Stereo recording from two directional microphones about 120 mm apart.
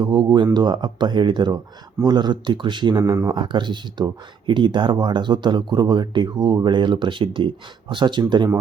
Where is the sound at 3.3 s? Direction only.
40° right (ahead or behind).